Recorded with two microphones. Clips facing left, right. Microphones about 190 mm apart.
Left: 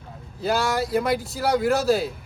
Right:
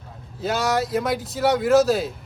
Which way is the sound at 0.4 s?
Centre (ahead or behind).